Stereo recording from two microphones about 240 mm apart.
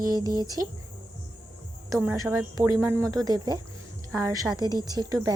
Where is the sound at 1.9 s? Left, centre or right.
Centre.